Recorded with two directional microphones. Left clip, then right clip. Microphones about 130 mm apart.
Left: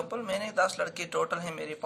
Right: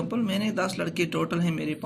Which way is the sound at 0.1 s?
20° right (ahead or behind).